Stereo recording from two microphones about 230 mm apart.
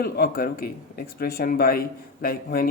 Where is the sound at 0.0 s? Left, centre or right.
Left.